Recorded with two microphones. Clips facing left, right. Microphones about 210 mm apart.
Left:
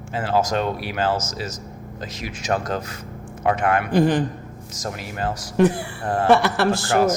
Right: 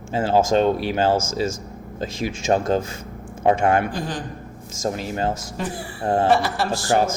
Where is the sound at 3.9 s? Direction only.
65° left (ahead or behind).